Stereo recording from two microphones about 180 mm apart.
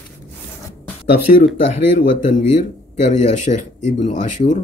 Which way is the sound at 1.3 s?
45° left (ahead or behind).